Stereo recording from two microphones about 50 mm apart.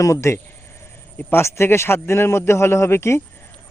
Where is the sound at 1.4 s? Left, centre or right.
Left.